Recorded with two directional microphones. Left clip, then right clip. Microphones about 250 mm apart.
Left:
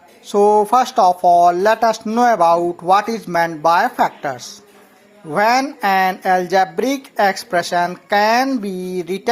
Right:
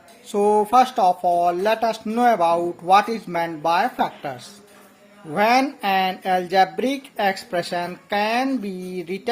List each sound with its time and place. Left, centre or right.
0.3 s speech: centre